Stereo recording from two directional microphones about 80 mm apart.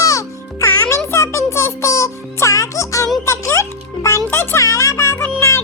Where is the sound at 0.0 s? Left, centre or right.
Left.